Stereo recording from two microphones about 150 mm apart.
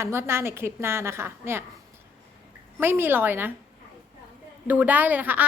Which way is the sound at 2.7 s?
15° right (ahead or behind).